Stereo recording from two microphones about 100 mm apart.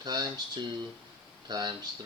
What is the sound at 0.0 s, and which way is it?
Speech, 45° right (ahead or behind).